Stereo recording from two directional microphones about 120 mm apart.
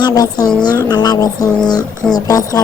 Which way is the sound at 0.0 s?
35° left (ahead or behind).